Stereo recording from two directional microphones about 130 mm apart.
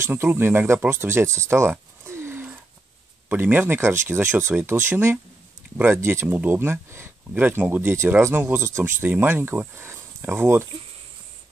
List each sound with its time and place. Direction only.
0.0 s speech: 15° right (ahead or behind)